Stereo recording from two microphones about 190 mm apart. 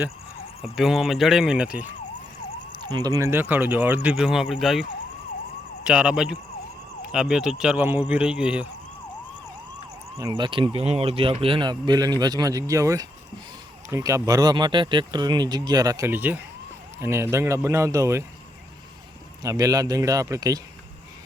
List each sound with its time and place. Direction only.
0.6 s speech: centre (ahead or behind)
2.9 s speech: 20° right (ahead or behind)
10.2 s speech: 20° right (ahead or behind)
19.4 s speech: 15° right (ahead or behind)